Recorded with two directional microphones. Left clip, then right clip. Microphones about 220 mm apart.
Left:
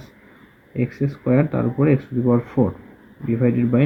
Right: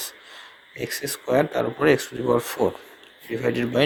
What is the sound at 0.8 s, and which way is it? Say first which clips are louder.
Speech: left 2 dB; 45° right (ahead or behind).